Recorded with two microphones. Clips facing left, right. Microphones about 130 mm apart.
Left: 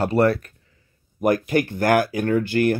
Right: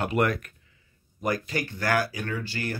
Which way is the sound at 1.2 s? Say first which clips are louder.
Left 9 dB; 55° left (ahead or behind).